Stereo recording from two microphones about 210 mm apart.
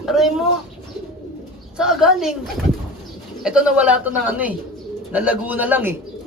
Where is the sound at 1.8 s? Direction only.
Centre (ahead or behind).